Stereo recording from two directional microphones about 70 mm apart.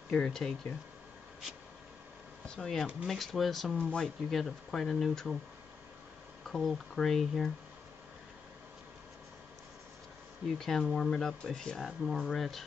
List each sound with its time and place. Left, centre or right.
0.1 s speech: centre
2.4 s speech: centre
6.4 s speech: centre
10.4 s speech: centre